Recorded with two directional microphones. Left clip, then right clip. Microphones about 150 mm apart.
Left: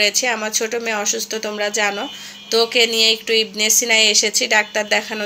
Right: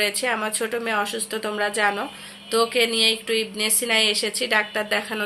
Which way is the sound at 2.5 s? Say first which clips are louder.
Left 5 dB; 20° left (ahead or behind).